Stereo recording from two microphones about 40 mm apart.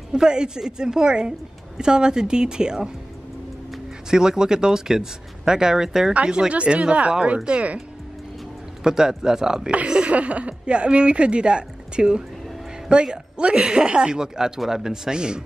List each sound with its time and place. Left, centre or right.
0.1 s a woman's voice: centre
4.1 s speech: centre
6.2 s a woman's voice: right
8.8 s a woman's voice: centre
10.1 s a woman's voice: right